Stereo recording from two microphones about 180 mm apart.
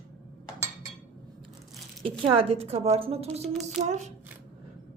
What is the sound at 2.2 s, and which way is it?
A woman's voice, 30° right (ahead or behind).